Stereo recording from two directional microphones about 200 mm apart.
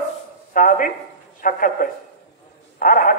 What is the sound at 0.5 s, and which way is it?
A man's voice, 45° left (ahead or behind).